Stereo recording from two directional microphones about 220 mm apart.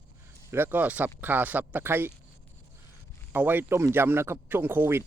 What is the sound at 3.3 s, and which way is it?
Speech, 10° right (ahead or behind).